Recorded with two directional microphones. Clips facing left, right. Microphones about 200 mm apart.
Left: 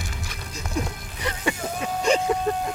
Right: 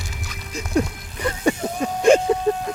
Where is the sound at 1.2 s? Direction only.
45° right (ahead or behind).